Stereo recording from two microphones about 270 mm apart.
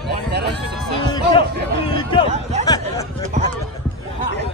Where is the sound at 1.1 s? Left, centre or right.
Centre.